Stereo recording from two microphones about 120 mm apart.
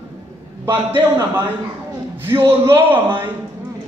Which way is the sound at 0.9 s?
20° right (ahead or behind).